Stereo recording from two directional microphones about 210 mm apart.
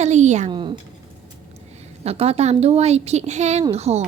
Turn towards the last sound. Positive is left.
turn(degrees=-30)  # may be behind; listen again after turning